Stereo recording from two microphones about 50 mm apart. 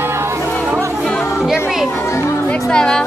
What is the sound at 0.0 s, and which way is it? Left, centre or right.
Music, right.